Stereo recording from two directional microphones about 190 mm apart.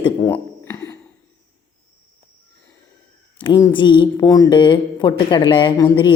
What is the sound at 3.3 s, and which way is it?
Speech, 20° left (ahead or behind).